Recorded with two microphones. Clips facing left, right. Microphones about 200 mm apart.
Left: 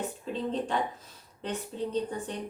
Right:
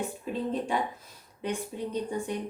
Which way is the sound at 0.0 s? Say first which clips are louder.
Right 1 dB; 10° right (ahead or behind).